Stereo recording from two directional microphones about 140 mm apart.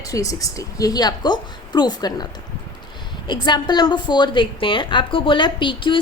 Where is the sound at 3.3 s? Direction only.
30° left (ahead or behind).